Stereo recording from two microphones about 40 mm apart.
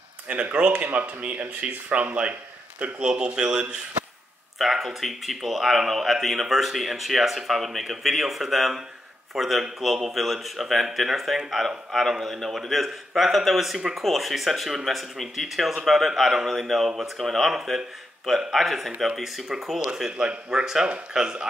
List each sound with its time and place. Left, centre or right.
0.3 s speech: right
3.0 s speech: right
4.6 s speech: centre
20.2 s speech: right
20.6 s speech: centre